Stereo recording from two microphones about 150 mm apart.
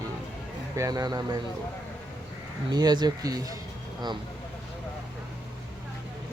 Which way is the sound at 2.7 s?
25° right (ahead or behind).